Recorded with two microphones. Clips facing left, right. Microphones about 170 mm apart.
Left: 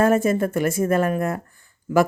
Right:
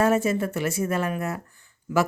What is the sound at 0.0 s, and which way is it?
Speech, 50° left (ahead or behind).